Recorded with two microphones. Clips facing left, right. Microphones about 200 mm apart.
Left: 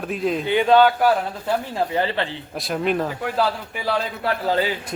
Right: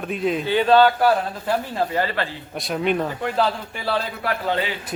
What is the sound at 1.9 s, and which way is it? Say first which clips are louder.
Speech: left 1 dB; 25° left (ahead or behind).